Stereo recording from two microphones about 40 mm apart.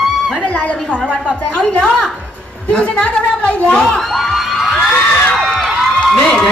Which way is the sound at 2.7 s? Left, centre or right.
Left.